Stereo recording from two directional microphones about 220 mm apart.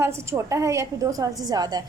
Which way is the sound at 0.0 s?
10° right (ahead or behind).